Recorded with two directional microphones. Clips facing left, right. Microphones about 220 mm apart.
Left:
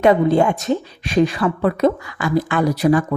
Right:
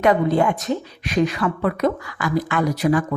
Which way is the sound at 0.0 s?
25° left (ahead or behind).